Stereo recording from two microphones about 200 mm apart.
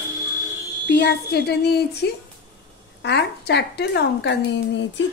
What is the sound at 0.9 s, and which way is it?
A woman's voice, 55° left (ahead or behind).